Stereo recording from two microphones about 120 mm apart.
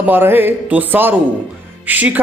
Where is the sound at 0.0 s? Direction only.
15° right (ahead or behind).